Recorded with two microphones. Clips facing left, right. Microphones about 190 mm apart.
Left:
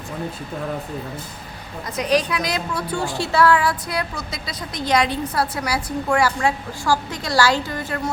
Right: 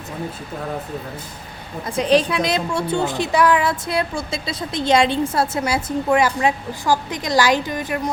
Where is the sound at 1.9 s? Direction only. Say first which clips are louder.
Right 3 dB; 30° right (ahead or behind).